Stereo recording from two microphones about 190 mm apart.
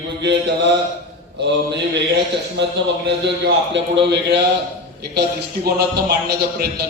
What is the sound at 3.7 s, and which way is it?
A man's voice, 65° right (ahead or behind).